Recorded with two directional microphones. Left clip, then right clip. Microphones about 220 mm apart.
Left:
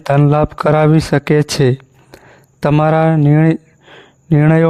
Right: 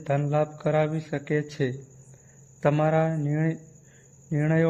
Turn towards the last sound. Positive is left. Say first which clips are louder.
# left 13 dB
turn(degrees=45)  # may be behind; listen again after turning